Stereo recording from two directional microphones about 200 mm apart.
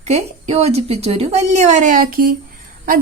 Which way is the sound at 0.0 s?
30° right (ahead or behind).